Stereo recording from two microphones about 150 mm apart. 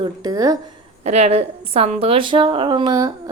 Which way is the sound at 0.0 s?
25° right (ahead or behind).